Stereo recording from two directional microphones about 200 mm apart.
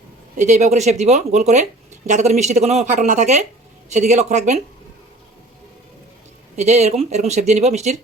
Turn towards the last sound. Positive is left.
turn(degrees=-35)  # may be behind; listen again after turning